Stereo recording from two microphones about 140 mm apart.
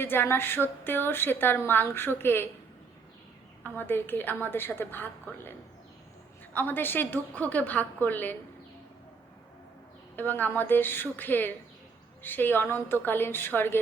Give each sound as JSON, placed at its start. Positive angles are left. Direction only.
{"t": 0.0, "sound": "a woman's voice", "side_deg": 15}
{"t": 3.6, "sound": "a woman's voice", "side_deg": 15}
{"t": 10.2, "sound": "a woman's voice", "side_deg": 15}